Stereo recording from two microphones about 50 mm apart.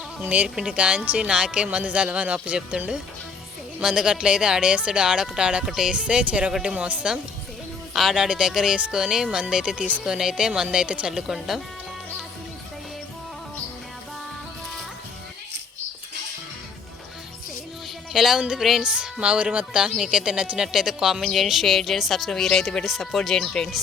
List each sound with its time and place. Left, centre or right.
0.3 s speech: right
0.9 s speech: right
1.3 s speech: centre
5.6 s speech: centre
5.9 s speech: right
6.8 s speech: right
7.9 s speech: centre; by 11.1 s right
11.1 s speech: centre
18.1 s speech: centre
20.7 s speech: centre